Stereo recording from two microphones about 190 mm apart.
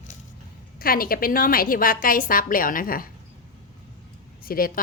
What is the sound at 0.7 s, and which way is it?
Speech, 50° left (ahead or behind).